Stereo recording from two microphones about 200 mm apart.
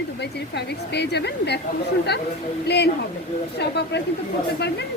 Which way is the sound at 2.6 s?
55° left (ahead or behind).